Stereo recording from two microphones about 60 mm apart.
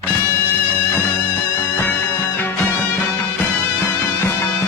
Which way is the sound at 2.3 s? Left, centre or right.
Left.